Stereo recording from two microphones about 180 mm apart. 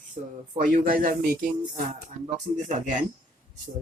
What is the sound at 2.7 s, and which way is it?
Speech, 45° right (ahead or behind).